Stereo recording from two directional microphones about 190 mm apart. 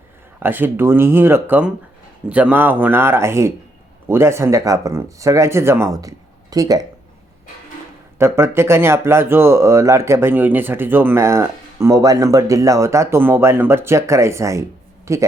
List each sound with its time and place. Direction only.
0.3 s speech: 10° right (ahead or behind)
8.2 s speech: 15° right (ahead or behind)